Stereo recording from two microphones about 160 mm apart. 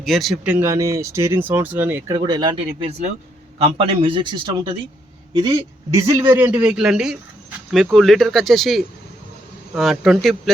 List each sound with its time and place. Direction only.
0.0 s speech: centre (ahead or behind)
0.7 s speech: 20° right (ahead or behind)
2.6 s a man's voice: 45° right (ahead or behind); by 10.5 s centre (ahead or behind)